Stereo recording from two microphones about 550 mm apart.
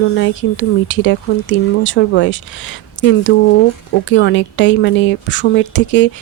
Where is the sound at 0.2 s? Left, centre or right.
Centre.